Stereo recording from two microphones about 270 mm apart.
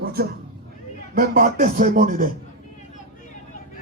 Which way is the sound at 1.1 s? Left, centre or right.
Right.